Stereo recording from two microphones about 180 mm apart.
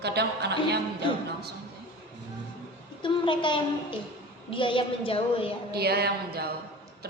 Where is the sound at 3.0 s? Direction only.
25° left (ahead or behind).